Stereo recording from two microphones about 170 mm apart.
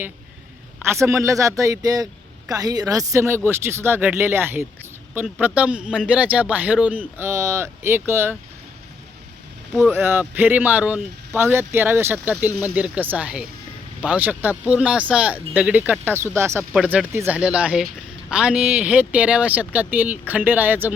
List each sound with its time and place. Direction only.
0.8 s a man's voice: 15° right (ahead or behind)
9.9 s speech: 15° right (ahead or behind)